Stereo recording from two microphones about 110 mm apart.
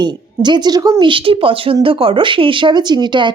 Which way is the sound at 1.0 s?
50° right (ahead or behind).